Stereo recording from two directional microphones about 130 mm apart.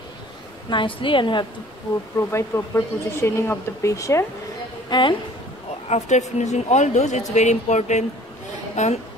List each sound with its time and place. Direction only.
0.7 s a woman's voice: 40° left (ahead or behind)
2.3 s speech: 20° left (ahead or behind)
4.8 s speech: 35° left (ahead or behind)
5.9 s speech: 60° left (ahead or behind)